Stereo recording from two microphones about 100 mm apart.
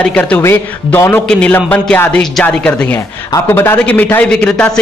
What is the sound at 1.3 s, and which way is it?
A man's voice, 10° left (ahead or behind).